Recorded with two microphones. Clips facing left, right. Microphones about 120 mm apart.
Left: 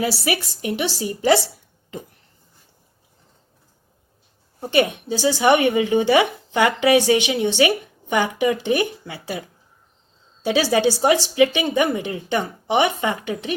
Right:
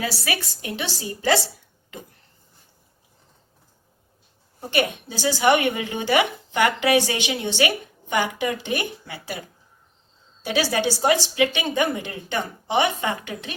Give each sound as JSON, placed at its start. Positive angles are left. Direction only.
{"t": 0.3, "sound": "speech", "side_deg": 20}
{"t": 4.7, "sound": "speech", "side_deg": 25}
{"t": 10.4, "sound": "speech", "side_deg": 25}